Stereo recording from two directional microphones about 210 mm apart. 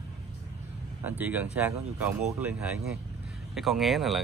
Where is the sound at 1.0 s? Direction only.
10° right (ahead or behind).